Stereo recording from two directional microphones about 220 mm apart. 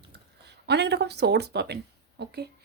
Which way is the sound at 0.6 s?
50° right (ahead or behind).